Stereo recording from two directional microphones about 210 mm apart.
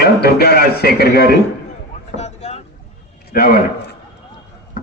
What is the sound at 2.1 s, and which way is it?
Boat, 30° left (ahead or behind).